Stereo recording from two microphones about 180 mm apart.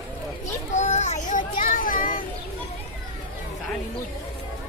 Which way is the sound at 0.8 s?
40° left (ahead or behind).